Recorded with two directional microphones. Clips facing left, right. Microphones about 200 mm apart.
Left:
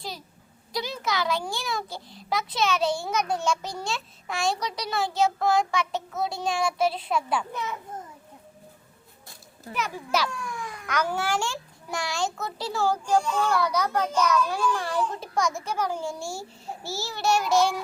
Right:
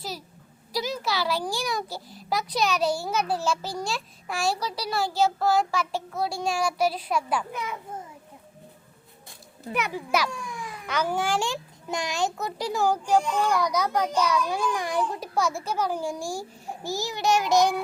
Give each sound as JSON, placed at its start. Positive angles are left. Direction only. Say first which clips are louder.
{"t": 0.7, "sound": "a sound", "louder": "right 2 dB", "side_deg": -5}
{"t": 1.0, "sound": "a child's voice", "louder": "left 3 dB", "side_deg": 20}
{"t": 2.4, "sound": "child singing", "louder": "even", "side_deg": 0}
{"t": 6.3, "sound": "speech", "louder": "right 1 dB", "side_deg": -10}
{"t": 6.7, "sound": "a child's voice", "louder": "even", "side_deg": 25}
{"t": 6.9, "sound": "speech", "louder": "even", "side_deg": -10}
{"t": 9.9, "sound": "speech", "louder": "left 1 dB", "side_deg": -10}
{"t": 15.4, "sound": "a child's voice", "louder": "right 1 dB", "side_deg": 15}
{"t": 15.8, "sound": "speech", "louder": "right 1 dB", "side_deg": -15}